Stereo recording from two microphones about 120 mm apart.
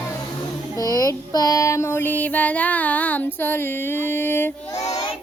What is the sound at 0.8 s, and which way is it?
Child singing, 30° left (ahead or behind).